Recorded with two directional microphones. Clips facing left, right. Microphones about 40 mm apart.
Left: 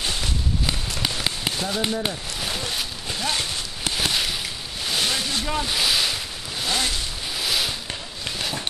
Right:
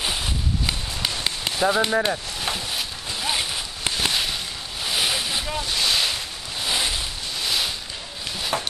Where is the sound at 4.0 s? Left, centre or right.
Centre.